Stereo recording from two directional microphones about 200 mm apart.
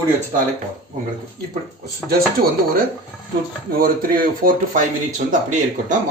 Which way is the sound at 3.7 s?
45° right (ahead or behind).